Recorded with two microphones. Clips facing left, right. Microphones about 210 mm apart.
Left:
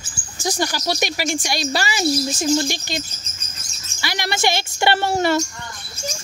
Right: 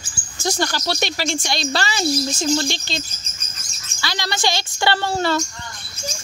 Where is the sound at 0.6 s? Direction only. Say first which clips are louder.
Left 1 dB; 10° left (ahead or behind).